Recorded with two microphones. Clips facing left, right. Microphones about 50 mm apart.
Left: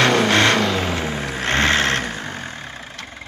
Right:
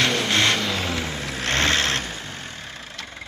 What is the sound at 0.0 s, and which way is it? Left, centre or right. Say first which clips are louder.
Vehicle: left 5 dB; left.